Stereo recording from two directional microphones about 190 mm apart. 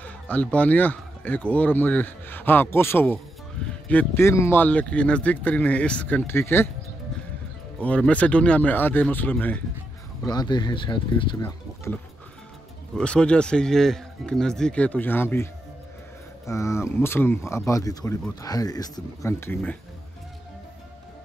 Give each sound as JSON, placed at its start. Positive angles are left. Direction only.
{"t": 0.0, "sound": "speech", "side_deg": 5}
{"t": 7.8, "sound": "speech", "side_deg": 5}
{"t": 10.2, "sound": "speech", "side_deg": 20}
{"t": 11.9, "sound": "speech", "side_deg": 15}